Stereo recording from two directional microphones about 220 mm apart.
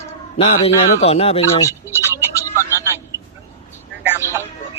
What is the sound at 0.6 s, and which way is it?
Speech, 30° left (ahead or behind).